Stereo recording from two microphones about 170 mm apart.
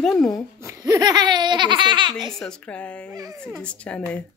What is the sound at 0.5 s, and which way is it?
Speech, 20° right (ahead or behind).